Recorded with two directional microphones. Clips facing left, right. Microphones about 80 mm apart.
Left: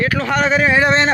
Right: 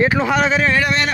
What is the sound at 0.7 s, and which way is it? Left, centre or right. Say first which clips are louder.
Speech: left 4 dB; left.